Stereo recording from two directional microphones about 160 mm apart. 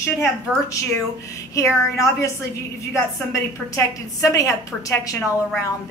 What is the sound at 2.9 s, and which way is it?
A woman's voice, 20° left (ahead or behind).